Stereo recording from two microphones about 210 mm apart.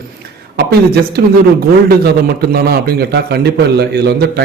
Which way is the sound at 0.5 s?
50° right (ahead or behind).